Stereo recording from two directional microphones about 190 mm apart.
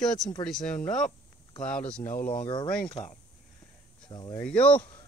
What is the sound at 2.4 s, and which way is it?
Speech, 25° left (ahead or behind).